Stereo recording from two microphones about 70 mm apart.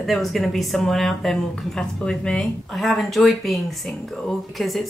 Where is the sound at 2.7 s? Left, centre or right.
Centre.